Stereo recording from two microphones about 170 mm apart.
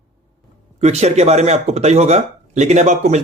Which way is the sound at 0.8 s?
40° right (ahead or behind).